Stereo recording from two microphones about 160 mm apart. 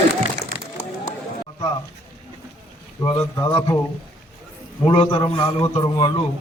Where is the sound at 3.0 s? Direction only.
20° left (ahead or behind).